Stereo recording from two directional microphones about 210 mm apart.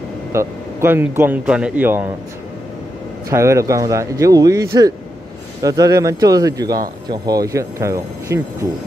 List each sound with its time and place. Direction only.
0.3 s a man's voice: 15° right (ahead or behind)
3.3 s a man's voice: 15° right (ahead or behind)